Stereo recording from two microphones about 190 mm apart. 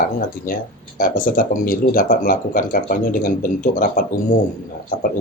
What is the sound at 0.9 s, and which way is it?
Speech, 45° left (ahead or behind).